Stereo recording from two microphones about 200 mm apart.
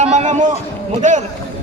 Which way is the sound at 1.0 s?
35° right (ahead or behind).